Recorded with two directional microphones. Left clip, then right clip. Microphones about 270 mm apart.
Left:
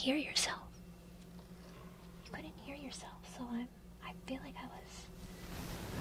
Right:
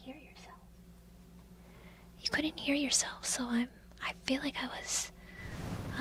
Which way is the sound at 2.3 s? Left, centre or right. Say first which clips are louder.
Right 16 dB; right.